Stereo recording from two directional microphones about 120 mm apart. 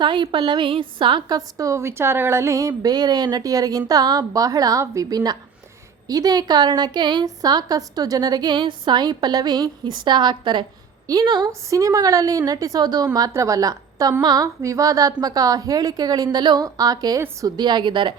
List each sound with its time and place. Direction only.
0.0 s a woman's voice: 40° right (ahead or behind)
1.4 s a woman's voice: 30° right (ahead or behind)